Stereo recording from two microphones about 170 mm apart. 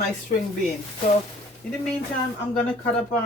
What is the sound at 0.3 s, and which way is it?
Speech, 50° left (ahead or behind).